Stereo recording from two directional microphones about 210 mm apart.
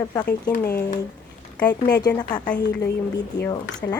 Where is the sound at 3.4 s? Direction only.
20° left (ahead or behind).